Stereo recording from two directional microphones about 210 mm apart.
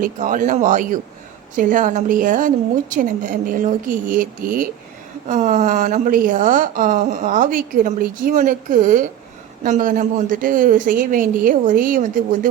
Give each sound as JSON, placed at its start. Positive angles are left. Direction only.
{"t": 0.0, "sound": "a woman's voice", "side_deg": -40}